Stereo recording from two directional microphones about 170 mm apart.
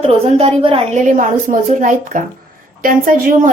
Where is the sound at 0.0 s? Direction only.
35° right (ahead or behind).